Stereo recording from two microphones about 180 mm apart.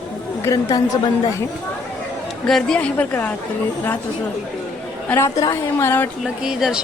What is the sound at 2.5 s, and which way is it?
Speech, 5° left (ahead or behind).